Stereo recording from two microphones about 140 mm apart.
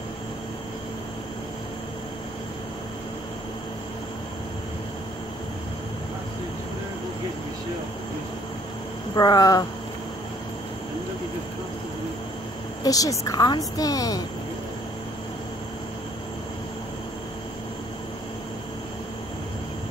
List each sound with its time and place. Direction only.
9.1 s a woman's voice: 30° left (ahead or behind)
12.8 s a woman's voice: 25° left (ahead or behind)